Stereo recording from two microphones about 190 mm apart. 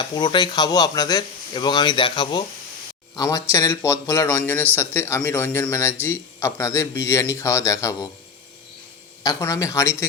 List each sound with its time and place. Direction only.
0.0 s speech: 25° left (ahead or behind)
9.2 s speech: 15° left (ahead or behind)